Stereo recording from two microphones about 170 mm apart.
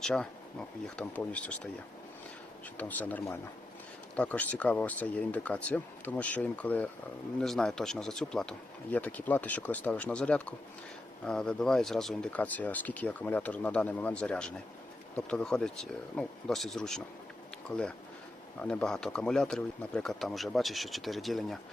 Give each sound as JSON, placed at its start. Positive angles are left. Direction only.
{"t": 0.0, "sound": "speech", "side_deg": 5}
{"t": 2.7, "sound": "speech", "side_deg": 10}